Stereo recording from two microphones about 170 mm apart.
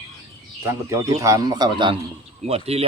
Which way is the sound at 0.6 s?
15° right (ahead or behind).